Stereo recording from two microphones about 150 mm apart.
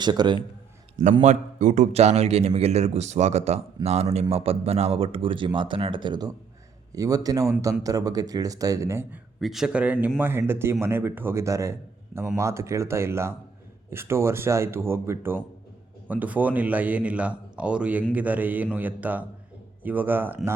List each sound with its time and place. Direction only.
0.0 s speech: 30° right (ahead or behind)
1.2 s a man's voice: 50° right (ahead or behind); by 9.0 s 20° right (ahead or behind)
9.4 s a man's voice: centre (ahead or behind)